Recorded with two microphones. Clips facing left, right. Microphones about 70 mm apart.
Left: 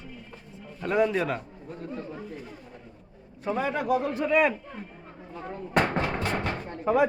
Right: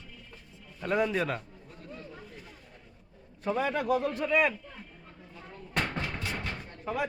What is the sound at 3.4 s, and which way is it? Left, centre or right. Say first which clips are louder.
A man's voice: left 1 dB; centre.